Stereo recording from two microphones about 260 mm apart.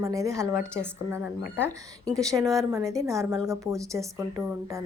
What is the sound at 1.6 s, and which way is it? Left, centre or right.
Speech, centre.